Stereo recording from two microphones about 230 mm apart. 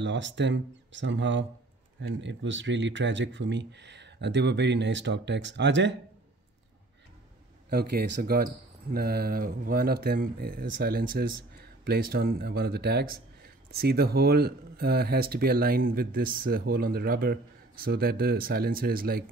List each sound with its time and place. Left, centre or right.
0.0 s speech: right
7.7 s speech: right